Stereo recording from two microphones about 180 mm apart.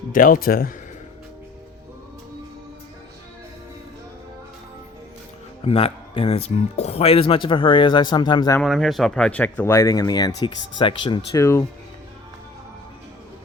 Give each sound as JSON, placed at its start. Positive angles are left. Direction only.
{"t": 0.1, "sound": "speech", "side_deg": 50}
{"t": 5.6, "sound": "speech", "side_deg": 35}
{"t": 8.6, "sound": "speech", "side_deg": 0}